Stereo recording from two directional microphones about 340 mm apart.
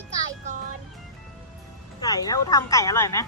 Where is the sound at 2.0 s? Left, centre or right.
Centre.